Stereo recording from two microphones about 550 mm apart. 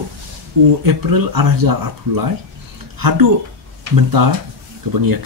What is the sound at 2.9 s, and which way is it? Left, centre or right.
Speech, right.